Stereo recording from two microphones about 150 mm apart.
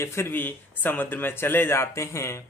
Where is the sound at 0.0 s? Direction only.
15° left (ahead or behind).